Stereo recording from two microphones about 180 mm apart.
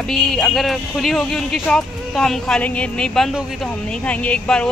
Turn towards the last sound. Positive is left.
turn(degrees=5)  # may be behind; listen again after turning